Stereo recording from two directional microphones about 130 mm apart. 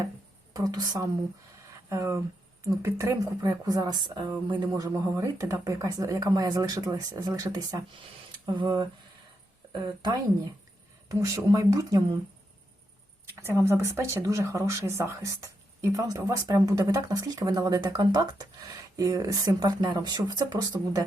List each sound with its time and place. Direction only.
0.5 s a woman's voice: 30° right (ahead or behind)
13.4 s speech: 20° right (ahead or behind)